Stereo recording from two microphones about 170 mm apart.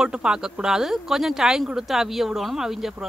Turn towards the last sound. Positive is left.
turn(degrees=0)  # may be behind; listen again after turning